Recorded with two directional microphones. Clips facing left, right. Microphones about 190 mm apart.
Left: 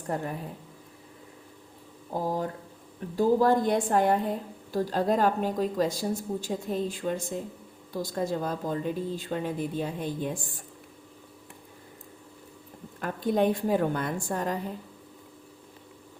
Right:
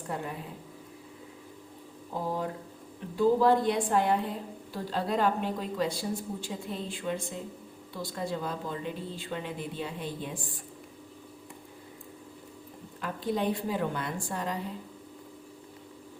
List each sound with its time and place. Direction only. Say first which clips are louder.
0.1 s a woman's voice: left 4 dB; 45° left (ahead or behind)
3.2 s a woman's voice: left 1 dB; 45° left (ahead or behind)
13.0 s a woman's voice: left 5 dB; 50° left (ahead or behind)